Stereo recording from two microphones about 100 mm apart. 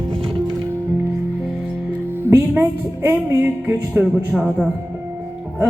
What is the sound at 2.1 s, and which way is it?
Music, 25° right (ahead or behind).